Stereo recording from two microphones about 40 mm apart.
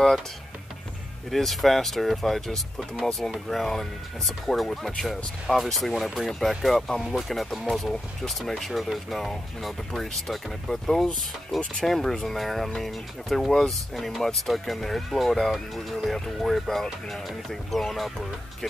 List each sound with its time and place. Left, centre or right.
1.3 s speech: centre